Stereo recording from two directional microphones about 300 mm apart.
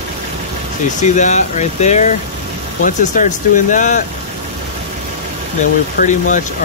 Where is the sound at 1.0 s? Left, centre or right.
Left.